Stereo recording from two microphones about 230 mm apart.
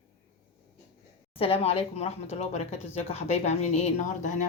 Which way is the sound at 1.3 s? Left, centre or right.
Left.